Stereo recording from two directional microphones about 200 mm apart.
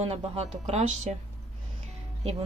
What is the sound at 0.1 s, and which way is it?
Speech, 30° right (ahead or behind).